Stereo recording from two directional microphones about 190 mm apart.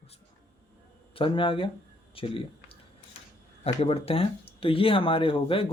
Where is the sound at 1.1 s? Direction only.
25° left (ahead or behind).